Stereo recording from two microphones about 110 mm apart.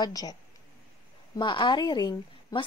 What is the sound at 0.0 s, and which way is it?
A woman's voice, 35° left (ahead or behind).